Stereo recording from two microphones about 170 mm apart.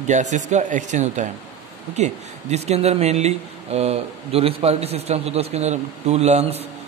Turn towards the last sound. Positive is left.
turn(degrees=-40)  # may be behind; listen again after turning